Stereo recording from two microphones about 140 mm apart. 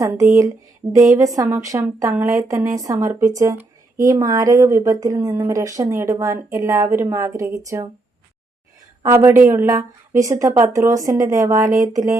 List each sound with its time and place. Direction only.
0.0 s a woman's voice: 20° right (ahead or behind)
9.0 s a woman's voice: 15° right (ahead or behind)